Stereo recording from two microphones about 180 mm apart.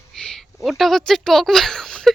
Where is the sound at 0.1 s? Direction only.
5° left (ahead or behind).